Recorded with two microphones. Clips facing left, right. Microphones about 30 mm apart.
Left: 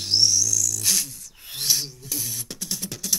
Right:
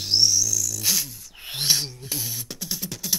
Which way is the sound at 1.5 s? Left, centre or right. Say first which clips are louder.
Right 2 dB; right.